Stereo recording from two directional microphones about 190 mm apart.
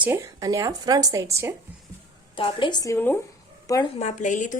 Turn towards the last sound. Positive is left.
turn(degrees=40)  # may be behind; listen again after turning